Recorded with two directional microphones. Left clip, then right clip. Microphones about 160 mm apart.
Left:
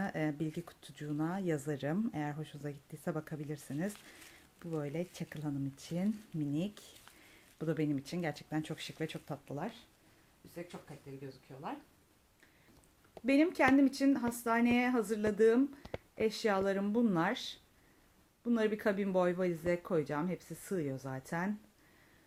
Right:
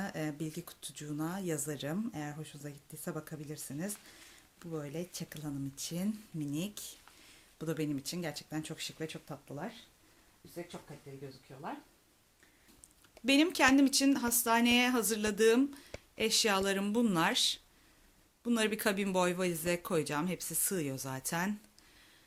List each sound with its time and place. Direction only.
0.0 s speech: 40° left (ahead or behind)
11.5 s speech: 20° left (ahead or behind)
13.2 s speech: 15° left (ahead or behind)